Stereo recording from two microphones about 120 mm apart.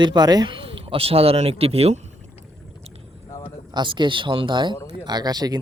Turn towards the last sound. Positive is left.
turn(degrees=-35)  # may be behind; listen again after turning